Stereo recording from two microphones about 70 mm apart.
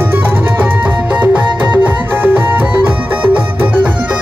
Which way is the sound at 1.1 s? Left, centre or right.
Right.